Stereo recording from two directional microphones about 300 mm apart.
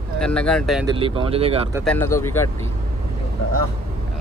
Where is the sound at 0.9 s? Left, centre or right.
Centre.